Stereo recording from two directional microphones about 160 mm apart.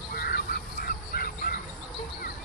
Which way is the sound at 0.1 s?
75° left (ahead or behind).